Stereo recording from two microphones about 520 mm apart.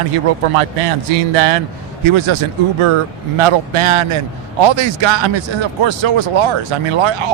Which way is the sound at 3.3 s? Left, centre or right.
Right.